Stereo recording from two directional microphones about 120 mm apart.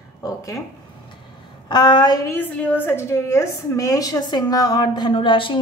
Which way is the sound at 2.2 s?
15° left (ahead or behind).